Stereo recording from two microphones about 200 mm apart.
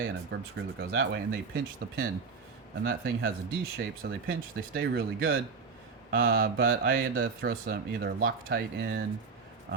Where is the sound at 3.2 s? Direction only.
45° right (ahead or behind).